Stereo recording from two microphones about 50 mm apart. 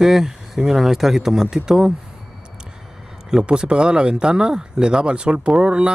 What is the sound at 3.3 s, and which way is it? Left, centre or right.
Speech, centre.